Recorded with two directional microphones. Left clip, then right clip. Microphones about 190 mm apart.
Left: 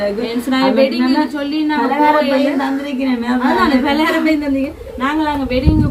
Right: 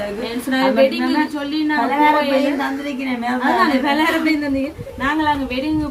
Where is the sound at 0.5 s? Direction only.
5° left (ahead or behind).